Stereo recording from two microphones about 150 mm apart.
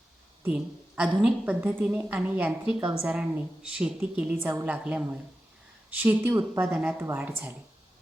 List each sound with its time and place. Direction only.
0.4 s a woman's voice: 10° right (ahead or behind)